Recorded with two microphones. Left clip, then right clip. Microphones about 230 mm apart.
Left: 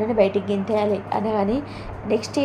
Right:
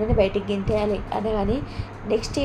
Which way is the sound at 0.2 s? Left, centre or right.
Left.